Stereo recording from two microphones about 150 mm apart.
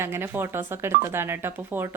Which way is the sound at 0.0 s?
15° right (ahead or behind).